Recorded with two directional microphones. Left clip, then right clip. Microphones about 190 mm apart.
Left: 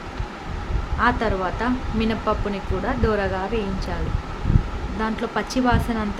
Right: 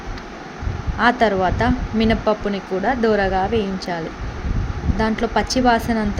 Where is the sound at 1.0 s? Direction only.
25° right (ahead or behind).